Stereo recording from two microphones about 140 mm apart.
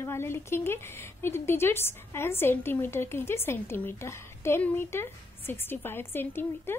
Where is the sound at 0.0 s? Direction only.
20° left (ahead or behind).